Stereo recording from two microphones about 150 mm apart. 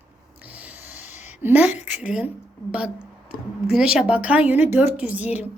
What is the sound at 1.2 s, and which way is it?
A woman's voice, 10° right (ahead or behind).